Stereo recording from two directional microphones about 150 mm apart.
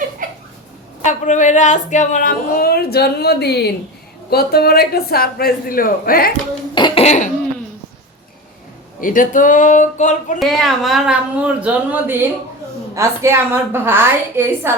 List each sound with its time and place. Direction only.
0.2 s a sound: 60° right (ahead or behind)
1.0 s speech: 55° left (ahead or behind); by 6.3 s 75° left (ahead or behind)
6.7 s cough: 30° left (ahead or behind)
7.0 s laughter: 50° left (ahead or behind)
9.0 s speech: 65° left (ahead or behind)
10.4 s a woman's voice: centre (ahead or behind); by 14.7 s 15° right (ahead or behind)